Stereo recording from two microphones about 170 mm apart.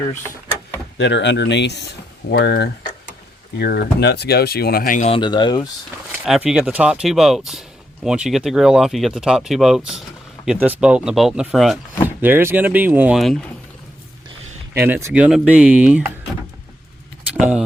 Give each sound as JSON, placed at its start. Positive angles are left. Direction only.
{"t": 0.9, "sound": "speech", "side_deg": 90}
{"t": 2.3, "sound": "speech", "side_deg": 70}
{"t": 5.0, "sound": "speech", "side_deg": 30}
{"t": 6.2, "sound": "speech", "side_deg": -5}
{"t": 12.0, "sound": "speech", "side_deg": -10}
{"t": 14.7, "sound": "speech", "side_deg": -15}
{"t": 17.3, "sound": "speech", "side_deg": -5}